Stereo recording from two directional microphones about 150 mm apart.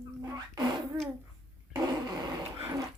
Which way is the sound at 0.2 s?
25° right (ahead or behind).